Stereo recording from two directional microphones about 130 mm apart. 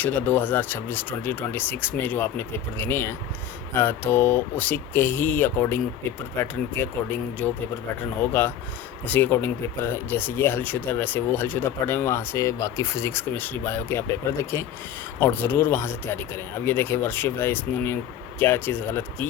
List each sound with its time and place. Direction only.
0.0 s speech: 15° left (ahead or behind)